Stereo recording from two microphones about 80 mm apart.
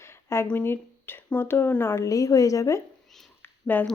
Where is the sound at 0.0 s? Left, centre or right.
Left.